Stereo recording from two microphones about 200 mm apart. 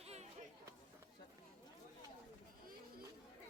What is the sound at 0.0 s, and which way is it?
Chatter, 30° right (ahead or behind).